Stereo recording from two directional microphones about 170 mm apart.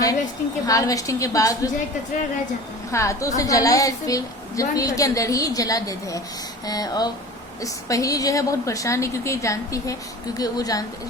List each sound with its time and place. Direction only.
0.7 s a woman's voice: 20° left (ahead or behind)
2.9 s a woman's voice: 15° left (ahead or behind)